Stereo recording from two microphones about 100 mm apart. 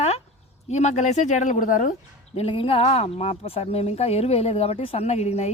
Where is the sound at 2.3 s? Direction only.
75° left (ahead or behind).